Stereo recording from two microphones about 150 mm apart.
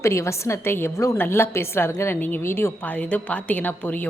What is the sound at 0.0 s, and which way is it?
A woman's voice, 20° left (ahead or behind).